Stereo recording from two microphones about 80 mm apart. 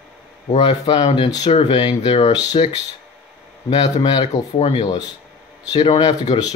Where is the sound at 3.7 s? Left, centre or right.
Left.